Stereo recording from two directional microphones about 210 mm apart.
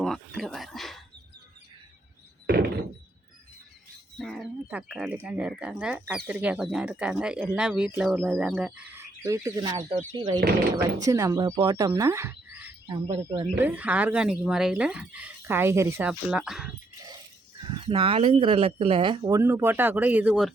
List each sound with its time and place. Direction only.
0.0 s a sound: centre (ahead or behind)
4.2 s speech: centre (ahead or behind)
12.9 s speech: 25° right (ahead or behind)
13.6 s speech: 10° right (ahead or behind)
17.6 s speech: 25° right (ahead or behind); by 20.5 s 5° right (ahead or behind)